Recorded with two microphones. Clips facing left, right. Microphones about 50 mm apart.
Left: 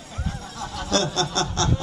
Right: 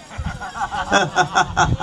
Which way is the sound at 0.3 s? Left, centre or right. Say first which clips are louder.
Right 10 dB; right.